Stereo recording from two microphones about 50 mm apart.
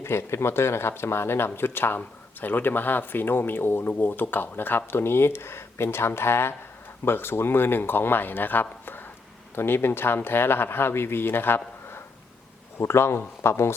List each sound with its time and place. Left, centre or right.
0.0 s speech: left